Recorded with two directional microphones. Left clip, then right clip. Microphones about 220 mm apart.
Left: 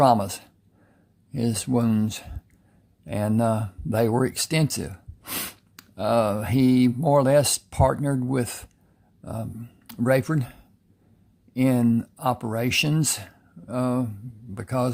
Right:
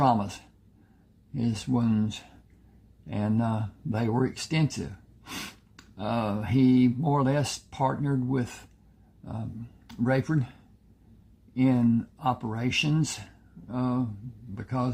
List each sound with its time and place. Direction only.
0.0 s speech: 40° left (ahead or behind)
9.8 s speech: 40° left (ahead or behind)